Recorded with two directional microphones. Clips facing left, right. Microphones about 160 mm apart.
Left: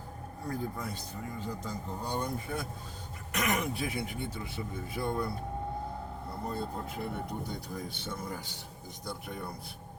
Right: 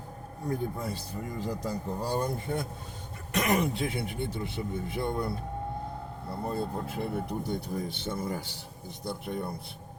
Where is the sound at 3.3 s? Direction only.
30° right (ahead or behind).